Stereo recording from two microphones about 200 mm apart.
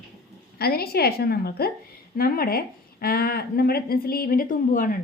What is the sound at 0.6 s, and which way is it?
Speech, 50° left (ahead or behind).